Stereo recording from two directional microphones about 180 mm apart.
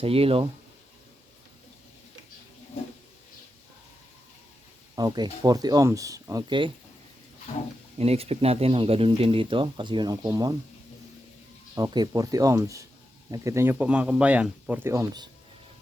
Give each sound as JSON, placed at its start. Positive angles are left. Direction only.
{"t": 0.0, "sound": "speech", "side_deg": -30}
{"t": 4.9, "sound": "speech", "side_deg": -25}
{"t": 7.9, "sound": "speech", "side_deg": -35}
{"t": 11.7, "sound": "speech", "side_deg": -20}